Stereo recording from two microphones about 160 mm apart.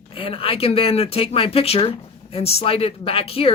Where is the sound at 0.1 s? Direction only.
35° left (ahead or behind).